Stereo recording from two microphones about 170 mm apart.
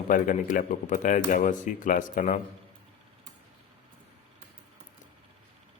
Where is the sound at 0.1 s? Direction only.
50° left (ahead or behind).